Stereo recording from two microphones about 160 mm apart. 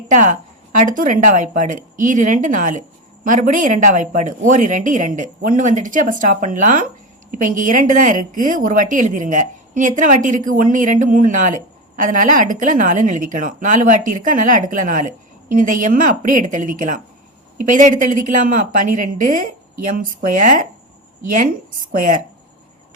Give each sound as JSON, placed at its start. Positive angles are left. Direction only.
{"t": 0.1, "sound": "a woman's voice", "side_deg": -50}